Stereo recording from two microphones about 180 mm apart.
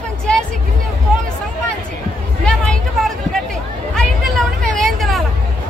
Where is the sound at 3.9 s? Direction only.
Centre (ahead or behind).